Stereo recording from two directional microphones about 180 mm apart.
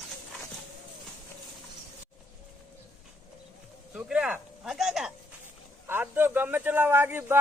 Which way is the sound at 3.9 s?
5° right (ahead or behind).